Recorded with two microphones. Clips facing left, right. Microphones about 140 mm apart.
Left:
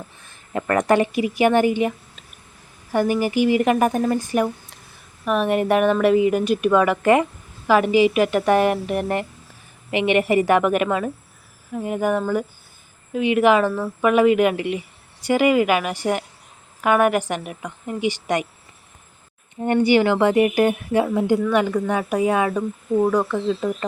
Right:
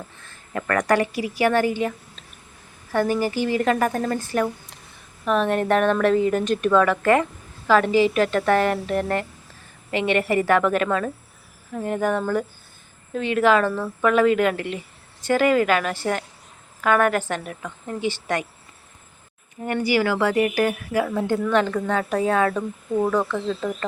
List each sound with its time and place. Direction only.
0.2 s speech: 20° left (ahead or behind)
2.9 s speech: 15° left (ahead or behind)
19.6 s a woman's voice: 25° left (ahead or behind)